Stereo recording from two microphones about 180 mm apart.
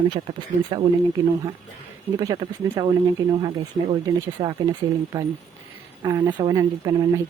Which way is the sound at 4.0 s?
20° right (ahead or behind).